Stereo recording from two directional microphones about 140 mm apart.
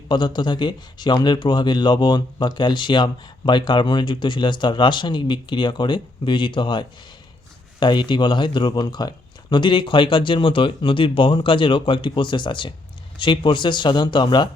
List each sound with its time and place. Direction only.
0.1 s speech: 30° left (ahead or behind)